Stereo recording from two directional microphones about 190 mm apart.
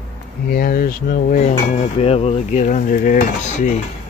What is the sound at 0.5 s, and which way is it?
Speech, 50° left (ahead or behind).